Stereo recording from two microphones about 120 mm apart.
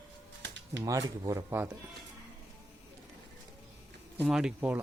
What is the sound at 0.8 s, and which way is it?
Speech, 30° right (ahead or behind).